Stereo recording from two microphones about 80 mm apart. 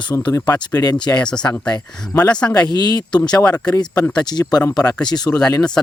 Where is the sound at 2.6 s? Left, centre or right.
Left.